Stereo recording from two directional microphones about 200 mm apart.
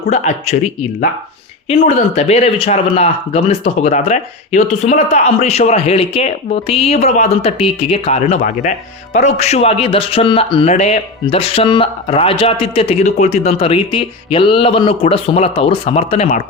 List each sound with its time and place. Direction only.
0.1 s speech: 35° left (ahead or behind)
2.1 s speech: 30° left (ahead or behind)